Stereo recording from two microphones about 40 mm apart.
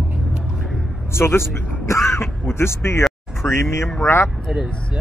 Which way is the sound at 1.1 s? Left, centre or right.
Left.